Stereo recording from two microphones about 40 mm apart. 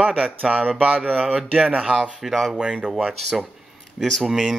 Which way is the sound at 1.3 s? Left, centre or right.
Centre.